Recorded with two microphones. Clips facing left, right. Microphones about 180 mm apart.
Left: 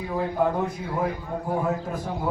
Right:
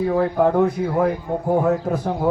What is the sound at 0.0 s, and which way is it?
A man's voice, 65° right (ahead or behind).